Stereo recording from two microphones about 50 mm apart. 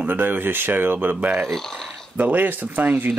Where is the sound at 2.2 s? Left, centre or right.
Right.